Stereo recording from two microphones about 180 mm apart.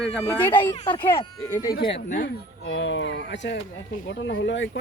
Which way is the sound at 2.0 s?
50° left (ahead or behind).